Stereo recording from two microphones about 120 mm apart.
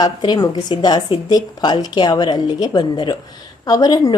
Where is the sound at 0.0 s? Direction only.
35° left (ahead or behind).